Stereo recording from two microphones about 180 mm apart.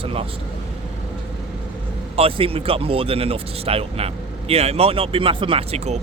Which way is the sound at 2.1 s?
35° right (ahead or behind).